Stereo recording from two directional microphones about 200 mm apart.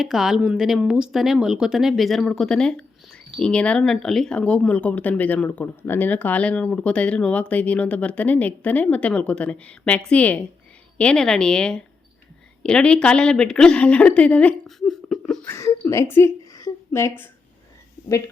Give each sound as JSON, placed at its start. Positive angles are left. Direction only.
{"t": 0.0, "sound": "a woman's voice", "side_deg": 0}